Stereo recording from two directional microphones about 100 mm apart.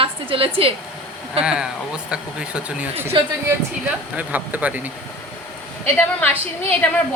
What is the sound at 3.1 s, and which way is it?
Speech, 55° right (ahead or behind).